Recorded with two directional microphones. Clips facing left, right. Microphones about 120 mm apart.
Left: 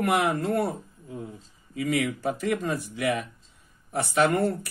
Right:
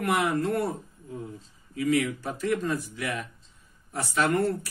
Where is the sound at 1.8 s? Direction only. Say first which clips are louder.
Right 1 dB; 60° left (ahead or behind).